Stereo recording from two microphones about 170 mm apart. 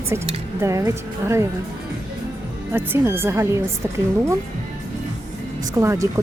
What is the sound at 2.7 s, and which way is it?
Speech, 15° right (ahead or behind).